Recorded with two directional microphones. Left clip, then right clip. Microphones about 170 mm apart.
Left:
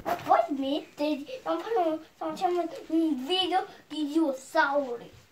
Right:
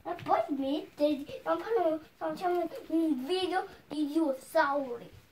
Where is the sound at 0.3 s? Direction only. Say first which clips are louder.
Left 5 dB; 5° right (ahead or behind).